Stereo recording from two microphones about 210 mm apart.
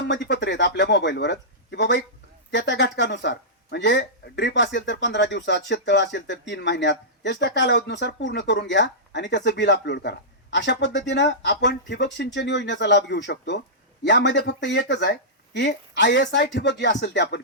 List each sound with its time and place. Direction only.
0.1 s speech: 60° left (ahead or behind)